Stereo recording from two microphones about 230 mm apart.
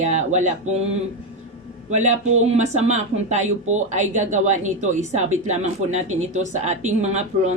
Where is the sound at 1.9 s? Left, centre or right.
Right.